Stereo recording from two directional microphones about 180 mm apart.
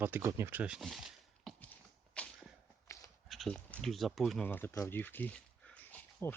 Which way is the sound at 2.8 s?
15° left (ahead or behind).